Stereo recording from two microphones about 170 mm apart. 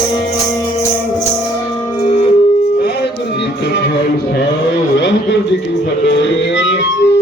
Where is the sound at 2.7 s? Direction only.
70° left (ahead or behind).